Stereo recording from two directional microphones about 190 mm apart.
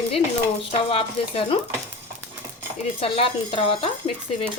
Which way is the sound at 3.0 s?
30° left (ahead or behind).